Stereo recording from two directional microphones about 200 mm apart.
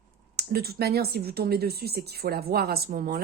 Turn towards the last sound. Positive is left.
turn(degrees=-45)  # may be behind; listen again after turning